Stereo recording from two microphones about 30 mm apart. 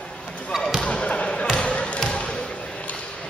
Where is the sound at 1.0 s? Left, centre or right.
Left.